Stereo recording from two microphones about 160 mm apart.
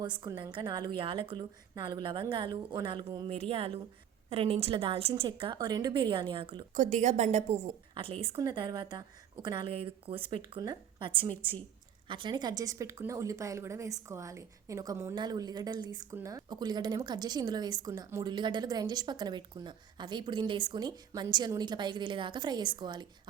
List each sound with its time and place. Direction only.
0.0 s a woman's voice: 25° right (ahead or behind)
6.7 s a woman's voice: 50° right (ahead or behind)
7.9 s a woman's voice: 35° right (ahead or behind)